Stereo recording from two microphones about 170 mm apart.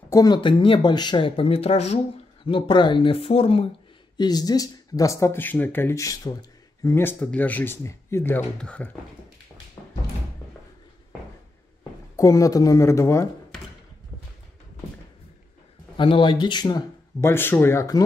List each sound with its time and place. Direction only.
0.1 s speech: 25° left (ahead or behind)
4.2 s speech: 25° left (ahead or behind); by 8.9 s 5° left (ahead or behind)
12.2 s speech: 20° left (ahead or behind)
16.0 s speech: 30° left (ahead or behind)